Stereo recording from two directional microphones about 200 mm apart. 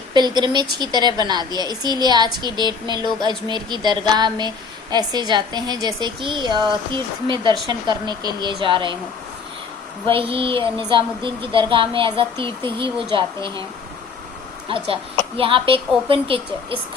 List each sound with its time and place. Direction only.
0.1 s speech: 20° right (ahead or behind)
10.1 s speech: 25° right (ahead or behind)
15.4 s speech: 25° right (ahead or behind)